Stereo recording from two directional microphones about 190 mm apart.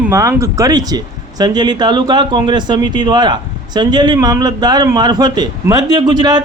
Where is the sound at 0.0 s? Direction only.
15° right (ahead or behind).